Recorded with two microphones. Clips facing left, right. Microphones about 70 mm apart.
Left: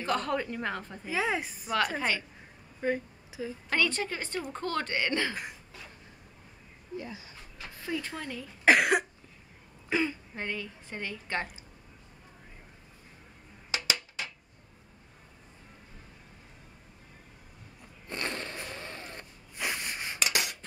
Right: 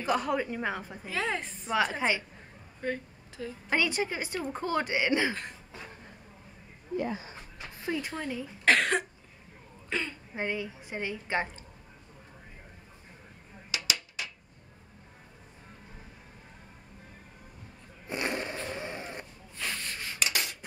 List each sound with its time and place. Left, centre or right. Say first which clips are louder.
0.0 s a woman's voice: right 1 dB; centre
1.1 s a woman's voice: left 2 dB; centre
2.0 s a woman's voice: right 2 dB; centre
2.8 s speech: left 3 dB; centre
3.7 s a woman's voice: right 1 dB; centre
5.3 s a woman's voice: right 1 dB; centre
7.0 s speech: right 9 dB; right
7.2 s a sound: right 2 dB; right
8.6 s a woman's voice: left 2 dB; centre
10.3 s a woman's voice: right 3 dB; centre
13.7 s a sound: left 2 dB; left
18.0 s a sound: right 3 dB; centre
19.5 s a sound: left 2 dB; centre